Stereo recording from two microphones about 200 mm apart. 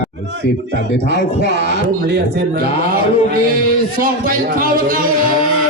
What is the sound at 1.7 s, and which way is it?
Speech, 55° right (ahead or behind).